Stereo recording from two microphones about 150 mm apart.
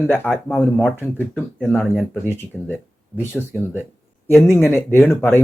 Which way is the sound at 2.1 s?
15° left (ahead or behind).